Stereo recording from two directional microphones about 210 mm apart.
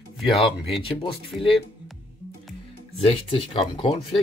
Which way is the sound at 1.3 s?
Centre (ahead or behind).